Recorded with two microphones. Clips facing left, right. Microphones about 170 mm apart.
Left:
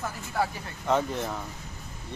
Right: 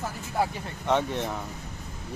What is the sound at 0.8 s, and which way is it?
Speech, centre (ahead or behind).